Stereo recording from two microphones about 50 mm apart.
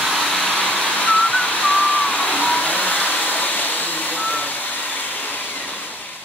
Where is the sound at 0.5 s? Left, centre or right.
Left.